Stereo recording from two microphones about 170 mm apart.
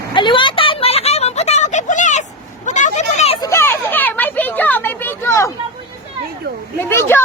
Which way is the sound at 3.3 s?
20° left (ahead or behind).